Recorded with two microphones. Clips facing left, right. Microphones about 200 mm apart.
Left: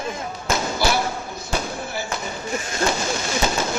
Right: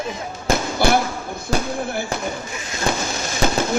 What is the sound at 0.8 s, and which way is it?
Basketball bounce, 55° right (ahead or behind).